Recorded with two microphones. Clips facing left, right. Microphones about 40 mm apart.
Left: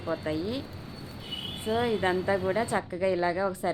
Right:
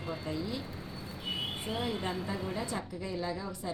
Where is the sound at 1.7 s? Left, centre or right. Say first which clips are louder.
Left 11 dB; left.